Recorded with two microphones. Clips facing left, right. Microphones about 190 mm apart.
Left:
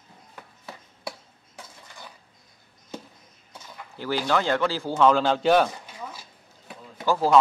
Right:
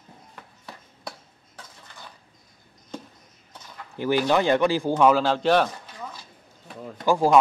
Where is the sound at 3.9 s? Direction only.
15° right (ahead or behind); by 5.7 s centre (ahead or behind).